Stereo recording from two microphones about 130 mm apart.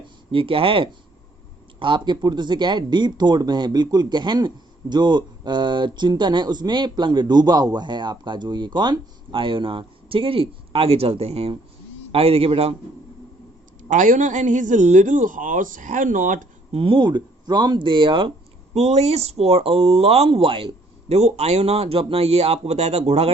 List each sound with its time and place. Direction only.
0.3 s speech: 45° right (ahead or behind)
13.9 s a man's voice: 80° right
16.7 s speech: 40° right (ahead or behind)
18.7 s speech: 55° right (ahead or behind)